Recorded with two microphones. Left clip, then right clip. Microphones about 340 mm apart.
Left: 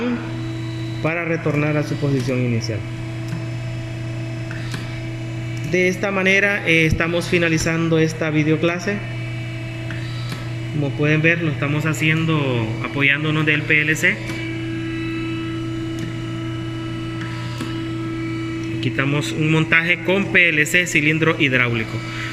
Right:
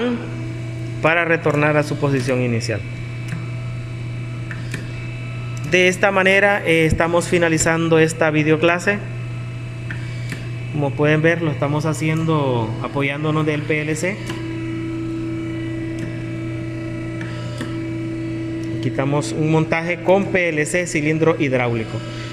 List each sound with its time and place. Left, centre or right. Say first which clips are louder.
1.0 s a man's voice: right 6 dB; right
5.7 s a man's voice: right 4 dB; right
11.0 s speech: right 1 dB; right
18.8 s speech: right 1 dB; centre